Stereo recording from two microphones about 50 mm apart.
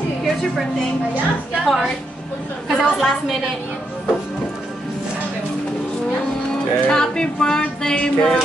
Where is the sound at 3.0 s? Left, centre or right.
Centre.